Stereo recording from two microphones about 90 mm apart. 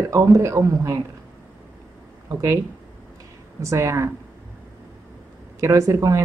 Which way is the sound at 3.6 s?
35° right (ahead or behind).